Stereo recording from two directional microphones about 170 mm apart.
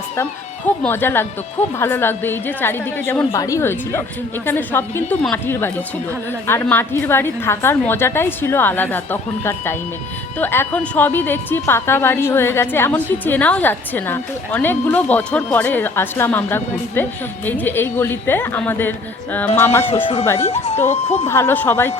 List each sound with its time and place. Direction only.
0.8 s a woman's voice: 10° left (ahead or behind)
20.9 s a woman's voice: 40° left (ahead or behind)
21.2 s a woman's voice: 15° left (ahead or behind)